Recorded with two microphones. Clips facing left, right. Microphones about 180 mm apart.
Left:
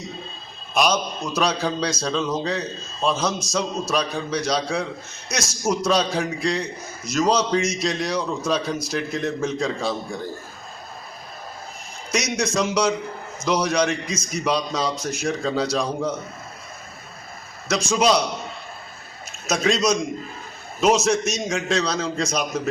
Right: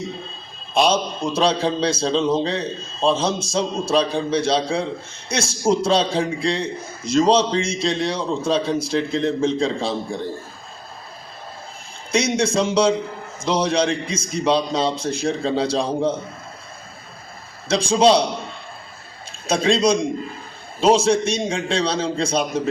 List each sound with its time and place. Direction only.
0.7 s a man's voice: 30° right (ahead or behind)
12.1 s a man's voice: 30° right (ahead or behind)
17.7 s a man's voice: 30° right (ahead or behind)
19.5 s a man's voice: 30° right (ahead or behind)